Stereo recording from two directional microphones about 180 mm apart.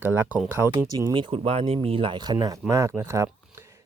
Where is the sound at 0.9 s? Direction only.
25° right (ahead or behind).